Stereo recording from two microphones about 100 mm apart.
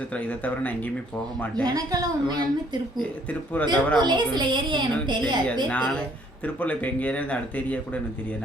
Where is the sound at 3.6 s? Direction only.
20° left (ahead or behind).